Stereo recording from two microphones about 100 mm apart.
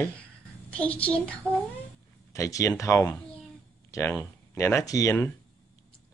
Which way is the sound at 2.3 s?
30° left (ahead or behind).